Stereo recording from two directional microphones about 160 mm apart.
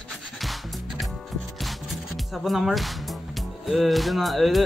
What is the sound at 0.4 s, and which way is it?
Music, centre (ahead or behind).